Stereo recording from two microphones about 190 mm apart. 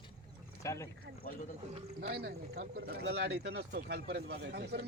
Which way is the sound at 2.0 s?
60° right (ahead or behind).